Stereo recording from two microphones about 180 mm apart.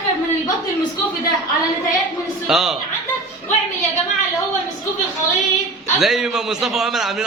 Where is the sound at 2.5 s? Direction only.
Centre (ahead or behind).